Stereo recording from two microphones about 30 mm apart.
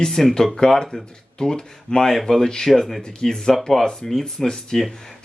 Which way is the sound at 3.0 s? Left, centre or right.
Left.